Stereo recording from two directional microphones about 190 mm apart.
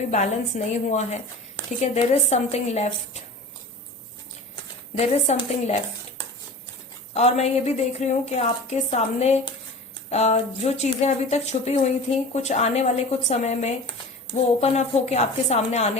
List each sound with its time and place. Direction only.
0.1 s speech: 35° left (ahead or behind)
4.9 s speech: 35° left (ahead or behind)
7.1 s speech: 35° left (ahead or behind)